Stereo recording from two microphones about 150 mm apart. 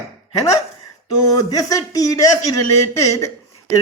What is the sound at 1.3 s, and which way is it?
Speech, 25° left (ahead or behind).